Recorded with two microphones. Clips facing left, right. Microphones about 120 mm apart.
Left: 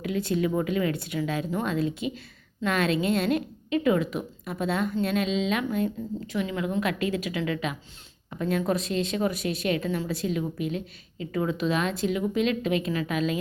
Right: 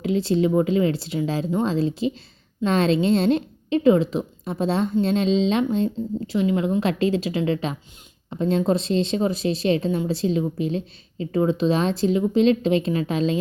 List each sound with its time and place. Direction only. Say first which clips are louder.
0.0 s a woman's voice: right 6 dB; 25° right (ahead or behind)